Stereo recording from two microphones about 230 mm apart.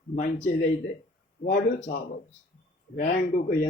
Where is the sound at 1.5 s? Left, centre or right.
Left.